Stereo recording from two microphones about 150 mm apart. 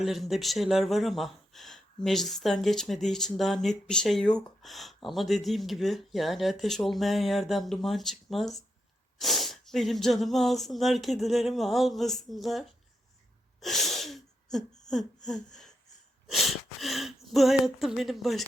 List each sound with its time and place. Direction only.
0.0 s speech: centre (ahead or behind)
13.6 s sneeze: centre (ahead or behind)
14.5 s a sound: 5° left (ahead or behind)
16.2 s sneeze: centre (ahead or behind)
17.3 s speech: centre (ahead or behind)